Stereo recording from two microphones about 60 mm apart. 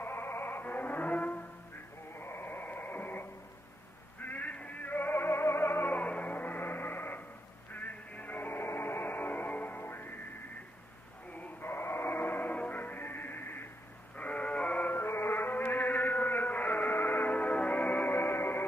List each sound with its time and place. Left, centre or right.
0.0 s music: left
2.1 s radio: left
4.2 s music: left
11.6 s music: left
14.1 s sheep: left
14.9 s chant: left
18.1 s music: left